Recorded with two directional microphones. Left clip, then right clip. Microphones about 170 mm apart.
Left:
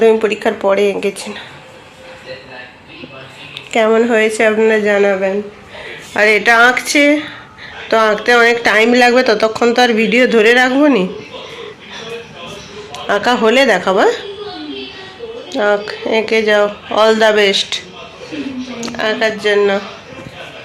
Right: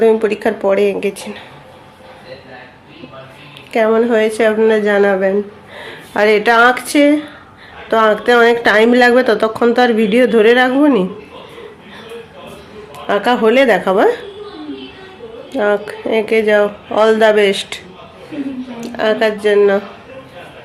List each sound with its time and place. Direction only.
0.0 s speech: 10° right (ahead or behind)
3.7 s speech: centre (ahead or behind); by 5.1 s 15° right (ahead or behind)
6.1 s speech: 15° right (ahead or behind)
13.1 s speech: 5° right (ahead or behind)
15.5 s speech: 20° right (ahead or behind)
18.8 s speech: 35° right (ahead or behind)